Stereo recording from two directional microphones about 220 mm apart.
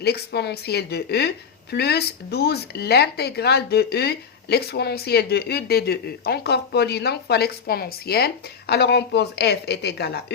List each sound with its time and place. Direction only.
0.0 s speech: 50° left (ahead or behind)